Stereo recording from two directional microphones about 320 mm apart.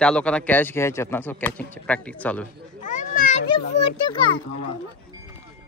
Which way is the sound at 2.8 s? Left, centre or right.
Left.